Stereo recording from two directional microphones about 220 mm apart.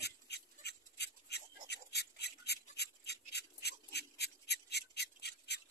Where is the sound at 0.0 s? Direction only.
50° left (ahead or behind).